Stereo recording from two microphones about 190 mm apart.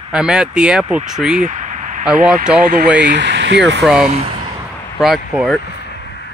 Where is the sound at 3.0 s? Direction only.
65° right (ahead or behind).